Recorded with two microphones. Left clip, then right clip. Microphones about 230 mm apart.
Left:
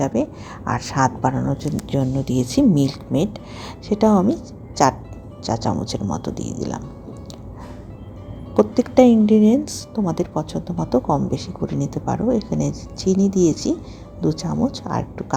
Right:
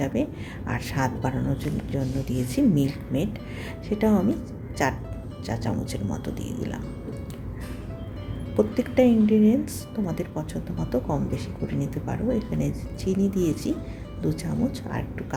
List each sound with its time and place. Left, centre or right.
0.0 s a woman's voice: left
1.9 s a woman's voice: left
8.5 s a woman's voice: left